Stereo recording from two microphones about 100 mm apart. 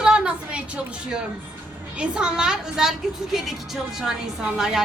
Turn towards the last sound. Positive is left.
turn(degrees=-5)  # may be behind; listen again after turning